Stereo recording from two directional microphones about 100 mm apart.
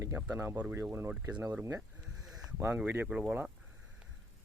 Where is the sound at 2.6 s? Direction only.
20° right (ahead or behind).